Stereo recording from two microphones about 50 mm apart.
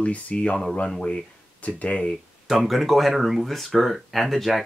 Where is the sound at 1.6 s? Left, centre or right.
Left.